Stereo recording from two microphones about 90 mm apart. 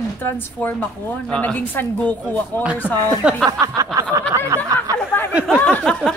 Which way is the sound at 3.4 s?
45° right (ahead or behind).